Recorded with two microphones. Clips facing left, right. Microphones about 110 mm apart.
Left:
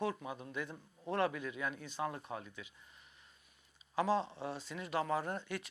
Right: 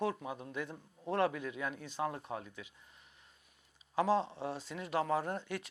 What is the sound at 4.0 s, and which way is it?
Speech, 50° right (ahead or behind).